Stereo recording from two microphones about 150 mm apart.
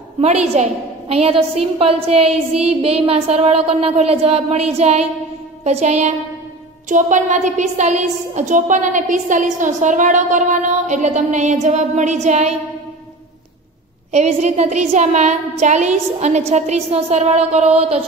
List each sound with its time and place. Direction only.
0.2 s a woman's voice: 45° right (ahead or behind)
14.1 s a woman's voice: 50° right (ahead or behind)